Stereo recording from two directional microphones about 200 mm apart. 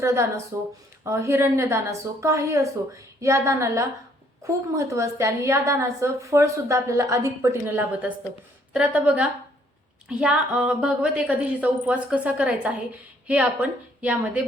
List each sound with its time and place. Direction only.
0.0 s a woman's voice: 15° right (ahead or behind)